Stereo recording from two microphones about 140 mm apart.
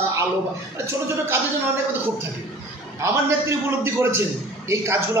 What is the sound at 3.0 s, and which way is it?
A man's voice, 20° right (ahead or behind).